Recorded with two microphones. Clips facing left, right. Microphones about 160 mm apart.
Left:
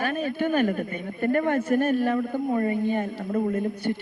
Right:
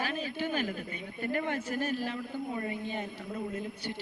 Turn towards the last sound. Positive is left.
turn(degrees=55)  # may be behind; listen again after turning